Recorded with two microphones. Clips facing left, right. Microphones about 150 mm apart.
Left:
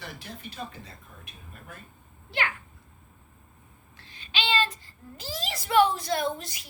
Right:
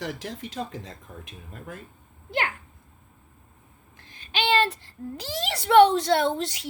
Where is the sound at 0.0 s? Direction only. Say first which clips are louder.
Right 8 dB; 90° right.